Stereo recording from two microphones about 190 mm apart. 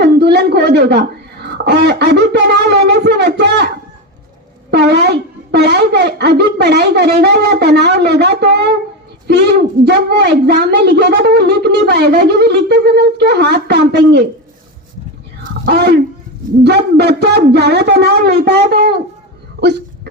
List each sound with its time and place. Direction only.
0.0 s speech: 60° right (ahead or behind)
4.7 s speech: 60° right (ahead or behind)
15.6 s speech: 60° right (ahead or behind)